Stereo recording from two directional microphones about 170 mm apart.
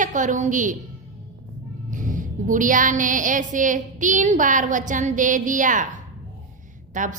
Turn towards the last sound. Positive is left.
turn(degrees=-50)  # may be behind; listen again after turning